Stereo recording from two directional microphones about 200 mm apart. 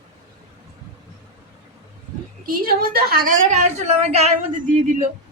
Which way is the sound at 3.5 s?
35° right (ahead or behind).